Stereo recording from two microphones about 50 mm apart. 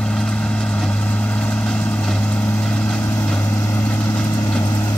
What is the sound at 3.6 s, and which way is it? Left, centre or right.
Vehicle, left.